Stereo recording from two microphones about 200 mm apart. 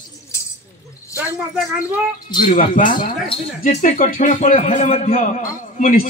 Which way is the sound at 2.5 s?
40° left (ahead or behind).